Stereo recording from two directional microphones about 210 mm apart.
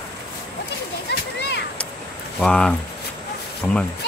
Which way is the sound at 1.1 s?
50° left (ahead or behind).